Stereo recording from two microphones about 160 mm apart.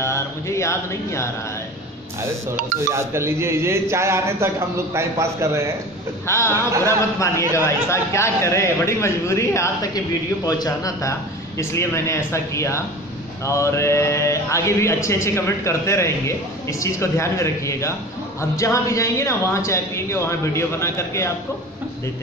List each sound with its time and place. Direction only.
0.0 s speech: 20° left (ahead or behind)
2.9 s a man's voice: 15° right (ahead or behind)
6.2 s speech: 15° left (ahead or behind)
6.5 s a man's voice: 20° right (ahead or behind)
7.2 s speech: 20° left (ahead or behind)